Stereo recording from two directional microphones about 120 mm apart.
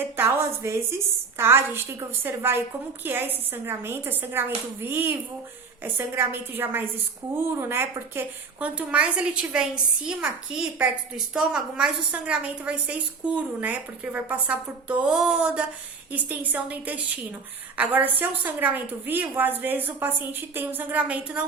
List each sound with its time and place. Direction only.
0.0 s a woman's voice: 20° right (ahead or behind)